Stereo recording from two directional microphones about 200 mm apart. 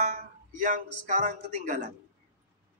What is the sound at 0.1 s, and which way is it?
Speech, 40° right (ahead or behind).